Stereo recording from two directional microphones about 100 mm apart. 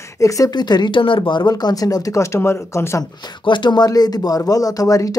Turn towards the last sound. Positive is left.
turn(degrees=35)  # may be behind; listen again after turning